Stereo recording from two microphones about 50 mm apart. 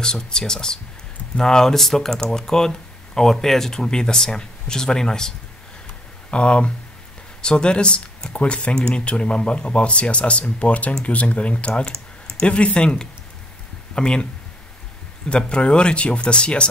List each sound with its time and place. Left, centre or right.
0.0 s speech: centre
6.3 s speech: left
15.2 s speech: left